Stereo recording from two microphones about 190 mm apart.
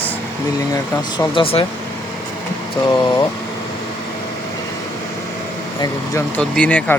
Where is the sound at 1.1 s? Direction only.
25° left (ahead or behind).